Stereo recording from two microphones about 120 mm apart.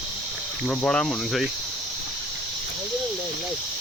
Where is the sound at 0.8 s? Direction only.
10° left (ahead or behind).